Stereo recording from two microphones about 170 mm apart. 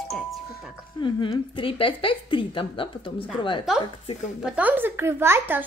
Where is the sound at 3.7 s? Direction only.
5° right (ahead or behind).